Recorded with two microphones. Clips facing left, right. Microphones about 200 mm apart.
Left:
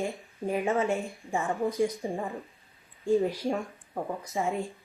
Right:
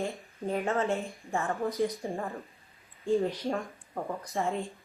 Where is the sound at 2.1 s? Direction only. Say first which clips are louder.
Left 2 dB; 15° left (ahead or behind).